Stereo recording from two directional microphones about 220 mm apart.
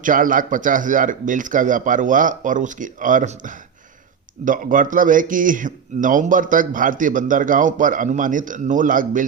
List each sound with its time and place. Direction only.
0.0 s a man's voice: 35° right (ahead or behind)